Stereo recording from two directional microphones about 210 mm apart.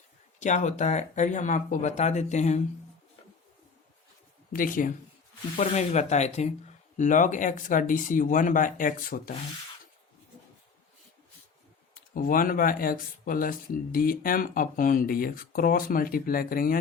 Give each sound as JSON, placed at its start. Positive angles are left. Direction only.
{"t": 0.3, "sound": "speech", "side_deg": 35}
{"t": 4.5, "sound": "speech", "side_deg": 40}
{"t": 11.9, "sound": "speech", "side_deg": 40}